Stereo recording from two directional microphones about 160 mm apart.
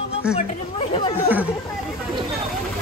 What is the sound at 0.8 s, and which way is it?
Chatter, 30° left (ahead or behind).